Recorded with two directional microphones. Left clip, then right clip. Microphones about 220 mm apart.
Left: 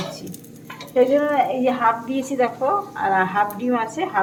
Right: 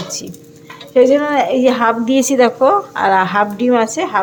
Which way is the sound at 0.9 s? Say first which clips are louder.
Right 6 dB; 50° right (ahead or behind).